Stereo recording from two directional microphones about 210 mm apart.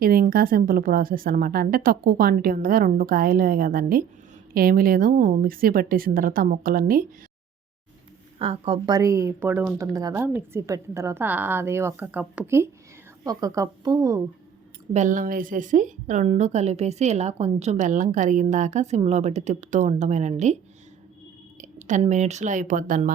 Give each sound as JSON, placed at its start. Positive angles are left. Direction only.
{"t": 0.0, "sound": "a woman's voice", "side_deg": -45}
{"t": 8.4, "sound": "a woman's voice", "side_deg": -25}
{"t": 14.9, "sound": "a woman's voice", "side_deg": -35}
{"t": 21.6, "sound": "speech", "side_deg": -35}